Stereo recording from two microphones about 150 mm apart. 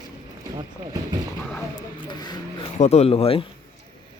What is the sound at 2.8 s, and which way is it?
Speech, 45° left (ahead or behind).